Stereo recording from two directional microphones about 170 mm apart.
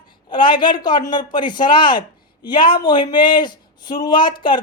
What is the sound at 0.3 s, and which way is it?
Speech, 25° left (ahead or behind).